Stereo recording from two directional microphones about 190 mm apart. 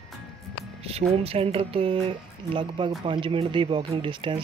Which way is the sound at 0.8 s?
30° right (ahead or behind).